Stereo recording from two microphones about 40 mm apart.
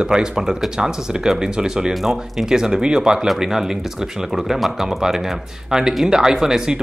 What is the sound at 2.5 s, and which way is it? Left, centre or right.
Speech, centre.